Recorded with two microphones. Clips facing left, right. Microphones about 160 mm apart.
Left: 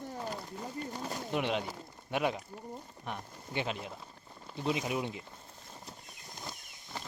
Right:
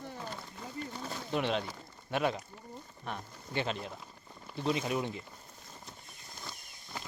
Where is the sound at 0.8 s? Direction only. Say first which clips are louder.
Left 1 dB; 10° left (ahead or behind).